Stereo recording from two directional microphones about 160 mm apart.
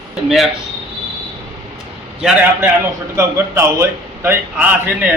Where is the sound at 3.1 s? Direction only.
15° right (ahead or behind).